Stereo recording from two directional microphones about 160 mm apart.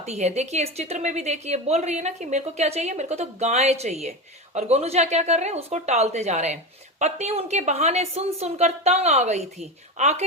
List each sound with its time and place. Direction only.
0.0 s a woman's voice: 45° right (ahead or behind)